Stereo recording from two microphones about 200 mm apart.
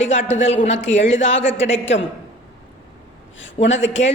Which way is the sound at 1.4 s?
65° left (ahead or behind).